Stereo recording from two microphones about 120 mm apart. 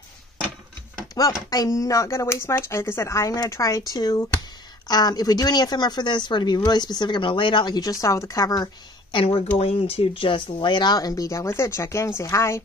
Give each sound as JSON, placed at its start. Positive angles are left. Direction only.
{"t": 1.1, "sound": "speech", "side_deg": 30}
{"t": 9.1, "sound": "speech", "side_deg": 50}